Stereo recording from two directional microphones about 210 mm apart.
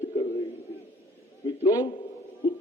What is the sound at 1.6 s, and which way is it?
Speech, 20° left (ahead or behind).